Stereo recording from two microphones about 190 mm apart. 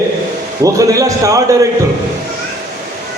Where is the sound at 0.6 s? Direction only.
15° right (ahead or behind).